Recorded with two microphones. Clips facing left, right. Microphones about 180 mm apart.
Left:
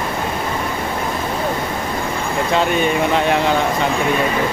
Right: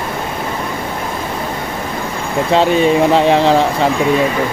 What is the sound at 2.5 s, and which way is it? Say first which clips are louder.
Speech: right 6 dB; 30° right (ahead or behind).